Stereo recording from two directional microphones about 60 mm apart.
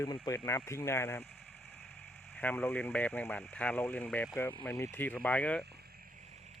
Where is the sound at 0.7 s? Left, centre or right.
Left.